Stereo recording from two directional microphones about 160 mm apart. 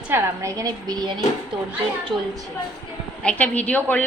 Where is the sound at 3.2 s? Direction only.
10° left (ahead or behind).